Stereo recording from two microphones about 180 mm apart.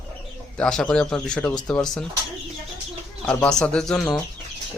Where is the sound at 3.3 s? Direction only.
5° left (ahead or behind).